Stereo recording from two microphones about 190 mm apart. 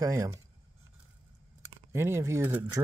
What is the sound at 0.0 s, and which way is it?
Speech, 15° right (ahead or behind).